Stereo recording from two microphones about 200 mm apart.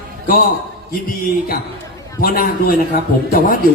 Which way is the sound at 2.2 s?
45° left (ahead or behind).